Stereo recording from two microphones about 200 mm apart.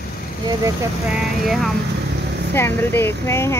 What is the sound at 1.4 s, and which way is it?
Speech, centre (ahead or behind).